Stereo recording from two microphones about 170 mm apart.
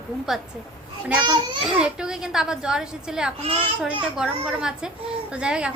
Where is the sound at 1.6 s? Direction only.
5° right (ahead or behind).